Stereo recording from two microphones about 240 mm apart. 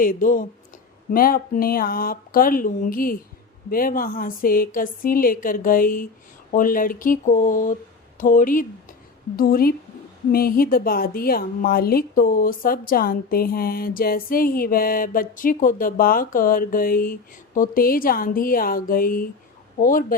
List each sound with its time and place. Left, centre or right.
0.0 s speech: left